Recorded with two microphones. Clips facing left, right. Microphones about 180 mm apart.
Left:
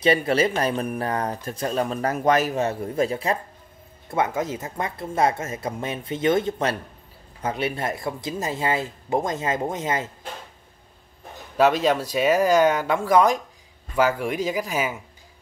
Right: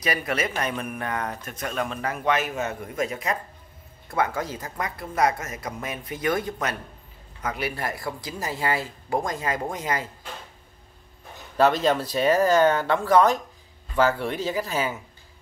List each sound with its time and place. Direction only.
0.0 s speech: 30° left (ahead or behind)
11.5 s speech: 5° left (ahead or behind)